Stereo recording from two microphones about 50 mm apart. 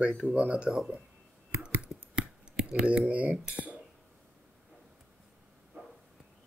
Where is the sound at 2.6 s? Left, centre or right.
Centre.